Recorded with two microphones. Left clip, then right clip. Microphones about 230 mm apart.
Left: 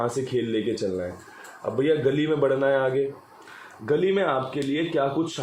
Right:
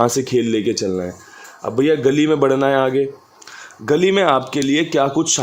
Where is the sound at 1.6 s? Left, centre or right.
Right.